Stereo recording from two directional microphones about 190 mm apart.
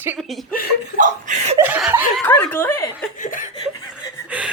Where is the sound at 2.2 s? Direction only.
10° left (ahead or behind).